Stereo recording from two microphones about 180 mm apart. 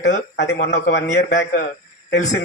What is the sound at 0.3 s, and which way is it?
Speech, 70° left (ahead or behind).